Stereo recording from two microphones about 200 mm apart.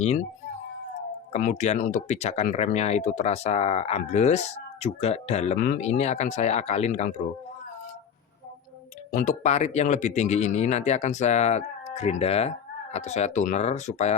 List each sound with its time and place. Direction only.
1.3 s speech: 40° left (ahead or behind)
9.1 s speech: 40° left (ahead or behind)